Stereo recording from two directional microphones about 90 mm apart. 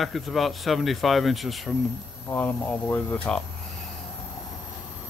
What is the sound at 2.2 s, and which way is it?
Speech, 20° left (ahead or behind).